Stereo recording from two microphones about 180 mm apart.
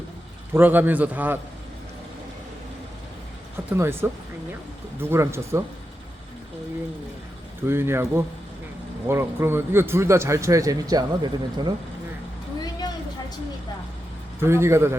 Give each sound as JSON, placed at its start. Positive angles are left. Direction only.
{"t": 0.5, "sound": "a man's voice", "side_deg": -10}
{"t": 3.7, "sound": "a man's voice", "side_deg": -10}
{"t": 7.6, "sound": "a man's voice", "side_deg": -15}
{"t": 14.4, "sound": "a man's voice", "side_deg": -15}